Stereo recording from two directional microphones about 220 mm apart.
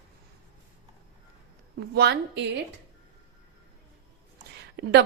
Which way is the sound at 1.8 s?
50° right (ahead or behind).